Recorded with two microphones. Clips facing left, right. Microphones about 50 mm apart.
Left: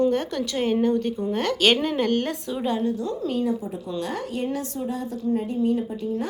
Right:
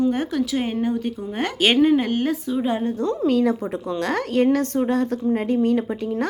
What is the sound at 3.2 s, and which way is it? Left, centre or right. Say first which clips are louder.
Speech: right 6 dB; right.